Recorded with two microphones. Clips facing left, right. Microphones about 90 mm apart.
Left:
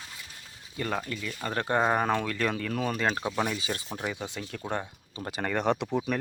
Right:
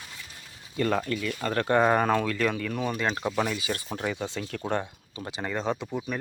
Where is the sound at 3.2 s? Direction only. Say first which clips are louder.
Right 2 dB; 10° left (ahead or behind).